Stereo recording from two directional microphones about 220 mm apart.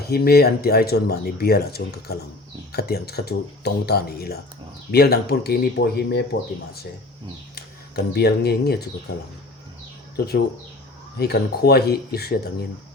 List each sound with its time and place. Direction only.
0.1 s speech: 45° left (ahead or behind)
8.1 s speech: 45° left (ahead or behind)
10.2 s speech: 45° left (ahead or behind)